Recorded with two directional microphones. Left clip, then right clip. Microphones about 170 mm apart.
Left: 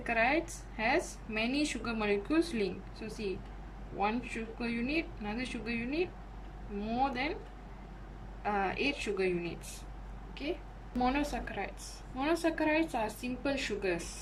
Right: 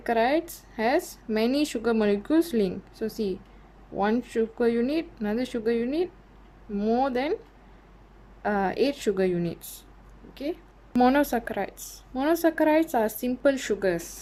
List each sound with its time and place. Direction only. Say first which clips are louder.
0.0 s speech: right 6 dB; 35° right (ahead or behind)
8.4 s speech: right 7 dB; 35° right (ahead or behind)
10.9 s a woman's voice: right 11 dB; 45° right (ahead or behind)